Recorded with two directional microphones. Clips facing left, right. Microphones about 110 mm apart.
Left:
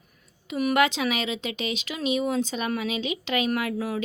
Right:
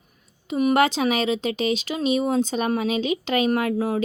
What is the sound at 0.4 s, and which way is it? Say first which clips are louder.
Speech: right 3 dB; 30° right (ahead or behind).